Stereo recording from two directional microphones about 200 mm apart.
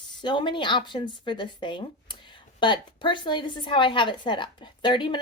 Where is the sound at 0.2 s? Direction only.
25° left (ahead or behind).